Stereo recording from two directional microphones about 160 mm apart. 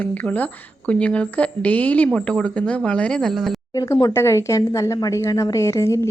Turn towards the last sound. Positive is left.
turn(degrees=15)  # may be behind; listen again after turning